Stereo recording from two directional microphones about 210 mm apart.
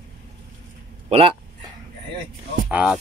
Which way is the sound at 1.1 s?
25° right (ahead or behind).